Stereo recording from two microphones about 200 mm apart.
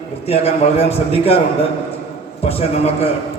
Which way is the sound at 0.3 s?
30° left (ahead or behind).